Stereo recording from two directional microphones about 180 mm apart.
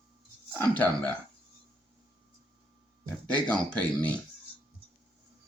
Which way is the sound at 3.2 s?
10° left (ahead or behind).